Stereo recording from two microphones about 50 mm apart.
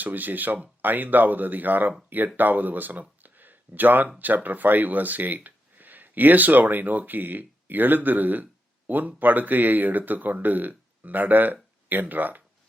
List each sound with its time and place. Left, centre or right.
0.0 s speech: right